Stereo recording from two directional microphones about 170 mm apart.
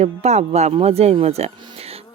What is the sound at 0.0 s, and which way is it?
Speech, 40° right (ahead or behind).